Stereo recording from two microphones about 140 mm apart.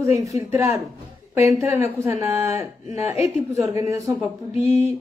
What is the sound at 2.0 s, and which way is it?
Speech, 15° right (ahead or behind).